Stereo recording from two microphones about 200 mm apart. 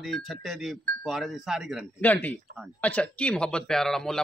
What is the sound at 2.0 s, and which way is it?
A man's voice, 10° left (ahead or behind).